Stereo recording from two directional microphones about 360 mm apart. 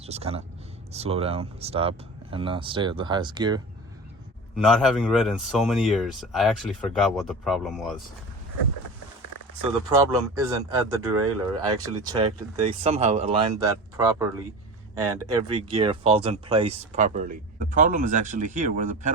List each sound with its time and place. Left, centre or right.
0.0 s speech: centre
4.5 s speech: centre
9.9 s speech: centre
15.3 s speech: centre